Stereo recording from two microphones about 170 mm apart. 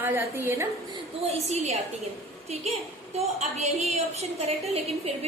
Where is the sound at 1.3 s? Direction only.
40° right (ahead or behind).